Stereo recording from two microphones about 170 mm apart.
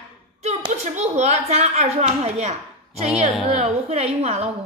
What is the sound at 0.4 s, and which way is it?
A woman's voice, 40° right (ahead or behind).